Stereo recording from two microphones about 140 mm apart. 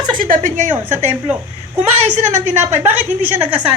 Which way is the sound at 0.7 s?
15° right (ahead or behind).